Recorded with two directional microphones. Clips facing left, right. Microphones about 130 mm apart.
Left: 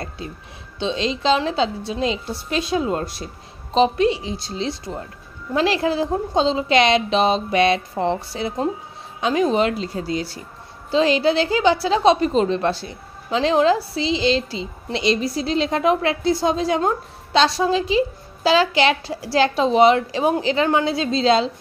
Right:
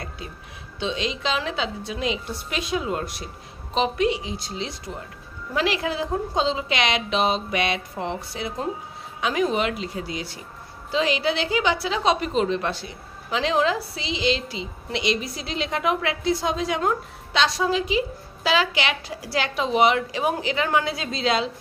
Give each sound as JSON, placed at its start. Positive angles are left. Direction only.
{"t": 0.7, "sound": "a woman's voice", "side_deg": 30}